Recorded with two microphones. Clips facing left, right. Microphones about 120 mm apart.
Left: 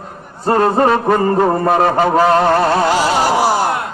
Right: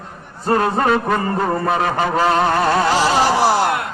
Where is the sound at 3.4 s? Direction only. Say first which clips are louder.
Left 1 dB; 5° left (ahead or behind).